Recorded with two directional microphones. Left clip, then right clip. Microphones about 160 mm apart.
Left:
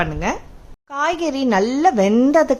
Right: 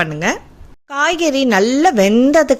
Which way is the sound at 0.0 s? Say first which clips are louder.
Right 4 dB; 15° right (ahead or behind).